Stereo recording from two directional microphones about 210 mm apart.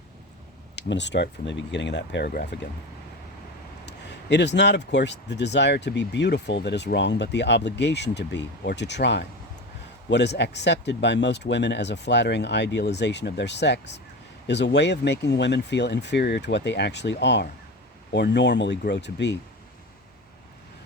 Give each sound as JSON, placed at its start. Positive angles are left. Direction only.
{"t": 0.8, "sound": "speech", "side_deg": 55}
{"t": 3.8, "sound": "speech", "side_deg": 55}